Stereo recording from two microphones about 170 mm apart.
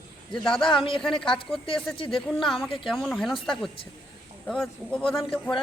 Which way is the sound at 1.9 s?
30° left (ahead or behind).